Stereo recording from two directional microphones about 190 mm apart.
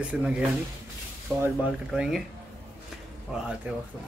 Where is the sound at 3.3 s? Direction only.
5° right (ahead or behind).